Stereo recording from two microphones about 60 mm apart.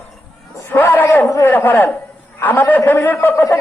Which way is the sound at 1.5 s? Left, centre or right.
Left.